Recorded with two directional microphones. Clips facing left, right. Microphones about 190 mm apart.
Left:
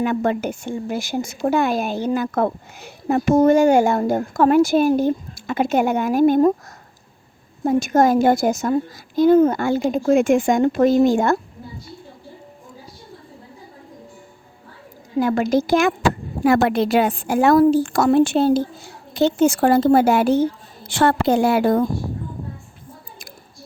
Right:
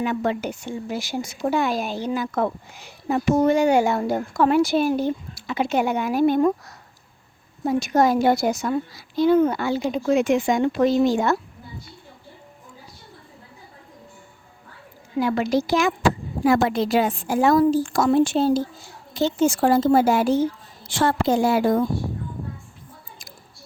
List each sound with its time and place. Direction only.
0.0 s speech: 50° left (ahead or behind)
7.6 s speech: 50° left (ahead or behind)
15.2 s speech: 45° left (ahead or behind)
16.4 s a woman's voice: 60° left (ahead or behind)